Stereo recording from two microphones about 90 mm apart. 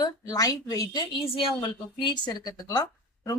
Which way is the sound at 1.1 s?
90° left.